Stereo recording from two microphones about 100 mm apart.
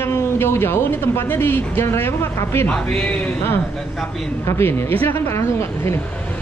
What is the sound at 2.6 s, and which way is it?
Speech, 10° left (ahead or behind).